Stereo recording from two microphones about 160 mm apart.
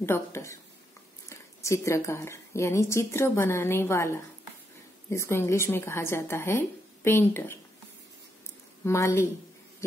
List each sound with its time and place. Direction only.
0.0 s a woman's voice: 15° left (ahead or behind)
1.6 s a woman's voice: 20° left (ahead or behind)
8.8 s a woman's voice: 15° left (ahead or behind)